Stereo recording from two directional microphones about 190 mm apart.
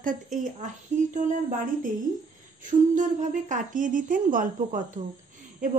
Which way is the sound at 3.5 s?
45° right (ahead or behind).